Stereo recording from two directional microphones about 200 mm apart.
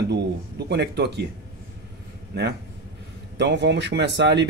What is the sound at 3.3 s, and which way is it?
A man's voice, 60° right (ahead or behind).